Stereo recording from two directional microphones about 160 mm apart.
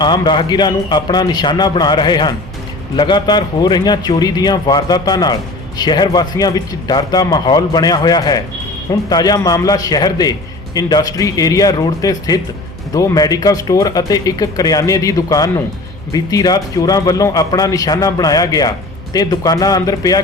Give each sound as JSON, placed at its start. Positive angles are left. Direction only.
{"t": 0.0, "sound": "a man's voice", "side_deg": 30}